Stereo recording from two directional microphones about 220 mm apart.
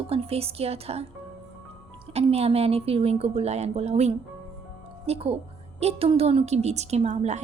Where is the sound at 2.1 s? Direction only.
30° right (ahead or behind).